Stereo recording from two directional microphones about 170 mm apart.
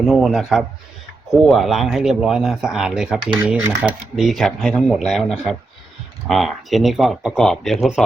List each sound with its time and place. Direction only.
0.0 s speech: centre (ahead or behind)